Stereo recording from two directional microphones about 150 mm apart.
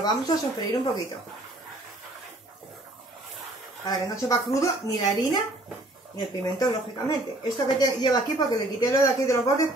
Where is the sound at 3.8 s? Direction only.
20° left (ahead or behind).